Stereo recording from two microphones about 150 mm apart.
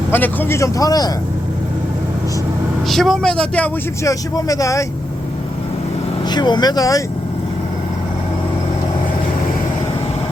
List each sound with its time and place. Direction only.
0.1 s a man's voice: 15° left (ahead or behind)
2.9 s speech: centre (ahead or behind)
4.0 s a man's voice: 25° left (ahead or behind)
6.3 s a man's voice: 30° left (ahead or behind)